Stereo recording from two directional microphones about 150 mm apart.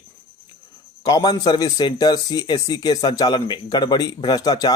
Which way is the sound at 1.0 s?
25° left (ahead or behind).